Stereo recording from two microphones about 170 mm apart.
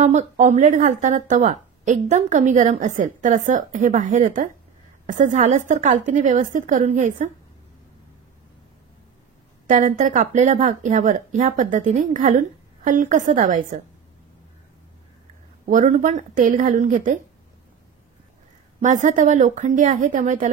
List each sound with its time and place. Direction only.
0.0 s speech: 45° right (ahead or behind)
9.7 s speech: 50° right (ahead or behind)
15.6 s speech: 50° right (ahead or behind)
18.8 s speech: 45° right (ahead or behind)